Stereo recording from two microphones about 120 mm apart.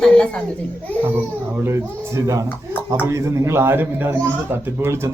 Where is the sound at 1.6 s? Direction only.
25° right (ahead or behind).